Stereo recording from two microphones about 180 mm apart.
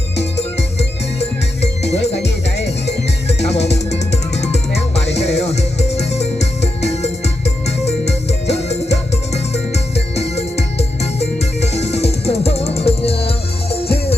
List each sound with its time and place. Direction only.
3.4 s music: 35° left (ahead or behind)